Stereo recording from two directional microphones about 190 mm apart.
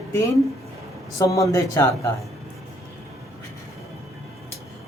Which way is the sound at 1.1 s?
15° left (ahead or behind).